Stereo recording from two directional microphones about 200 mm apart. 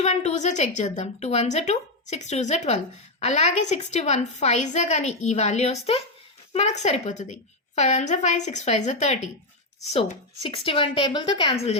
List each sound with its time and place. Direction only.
0.0 s a woman's voice: 35° left (ahead or behind)
10.4 s a woman's voice: 30° left (ahead or behind)